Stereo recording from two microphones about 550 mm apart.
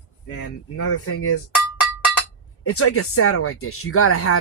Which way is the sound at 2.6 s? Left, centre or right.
Left.